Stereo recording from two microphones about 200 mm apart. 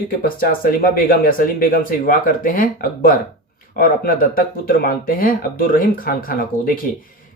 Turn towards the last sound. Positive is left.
turn(degrees=45)  # may be behind; listen again after turning